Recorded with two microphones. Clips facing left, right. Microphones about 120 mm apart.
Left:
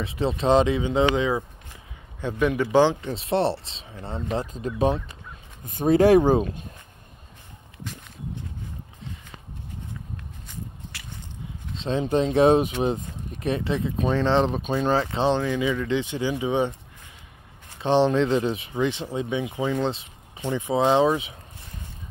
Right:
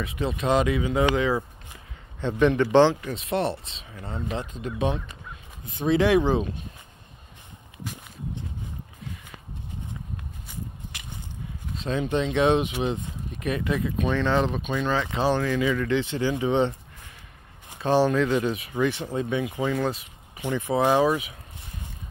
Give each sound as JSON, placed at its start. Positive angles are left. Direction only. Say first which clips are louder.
{"t": 0.0, "sound": "a man's voice", "louder": "left 3 dB", "side_deg": 30}
{"t": 3.0, "sound": "speech", "louder": "left 3 dB", "side_deg": 30}
{"t": 10.5, "sound": "a sound", "louder": "even", "side_deg": -20}
{"t": 11.8, "sound": "speech", "louder": "left 3 dB", "side_deg": 30}
{"t": 17.7, "sound": "speech", "louder": "left 1 dB", "side_deg": 20}